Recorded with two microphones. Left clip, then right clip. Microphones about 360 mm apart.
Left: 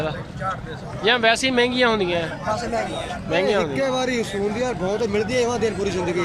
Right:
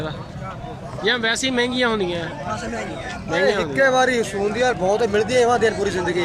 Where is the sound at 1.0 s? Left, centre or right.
Centre.